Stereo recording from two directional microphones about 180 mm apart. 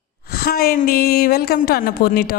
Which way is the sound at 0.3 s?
60° left (ahead or behind).